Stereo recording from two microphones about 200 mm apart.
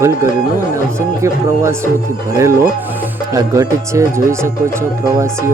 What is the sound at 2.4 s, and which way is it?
Speech, 15° right (ahead or behind).